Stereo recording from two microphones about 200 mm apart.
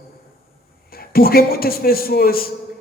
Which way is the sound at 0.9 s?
50° left (ahead or behind).